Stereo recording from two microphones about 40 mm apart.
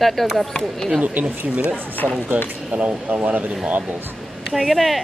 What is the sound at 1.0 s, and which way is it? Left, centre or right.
Speech, right.